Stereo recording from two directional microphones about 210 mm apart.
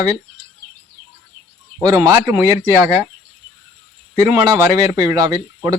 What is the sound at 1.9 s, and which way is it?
Speech, 15° right (ahead or behind).